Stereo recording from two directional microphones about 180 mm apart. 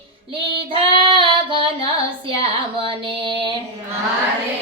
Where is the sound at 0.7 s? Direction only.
30° right (ahead or behind).